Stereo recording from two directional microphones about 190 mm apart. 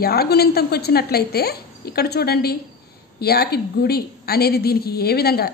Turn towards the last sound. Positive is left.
turn(degrees=55)  # may be behind; listen again after turning